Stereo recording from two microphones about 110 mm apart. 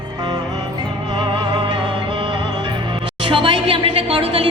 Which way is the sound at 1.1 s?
50° right (ahead or behind).